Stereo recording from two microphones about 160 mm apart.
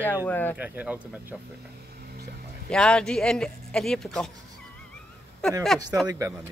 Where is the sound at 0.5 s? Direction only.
10° right (ahead or behind).